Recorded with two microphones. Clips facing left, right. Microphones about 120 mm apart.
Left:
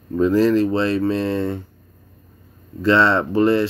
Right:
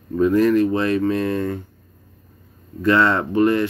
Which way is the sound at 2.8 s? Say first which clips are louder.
Left 1 dB; 25° left (ahead or behind).